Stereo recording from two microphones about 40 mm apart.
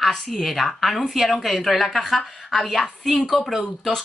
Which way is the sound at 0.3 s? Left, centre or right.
Centre.